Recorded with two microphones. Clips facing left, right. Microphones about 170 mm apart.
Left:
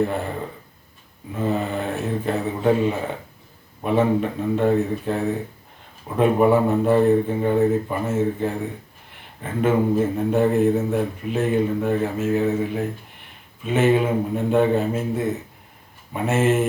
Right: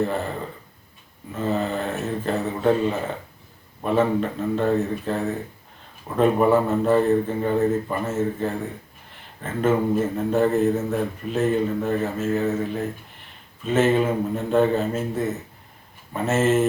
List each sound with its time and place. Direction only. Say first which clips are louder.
1.3 s a man's voice: left 1 dB; 10° left (ahead or behind)